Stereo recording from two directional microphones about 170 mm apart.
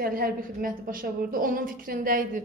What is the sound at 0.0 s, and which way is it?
A woman's voice, 60° right (ahead or behind).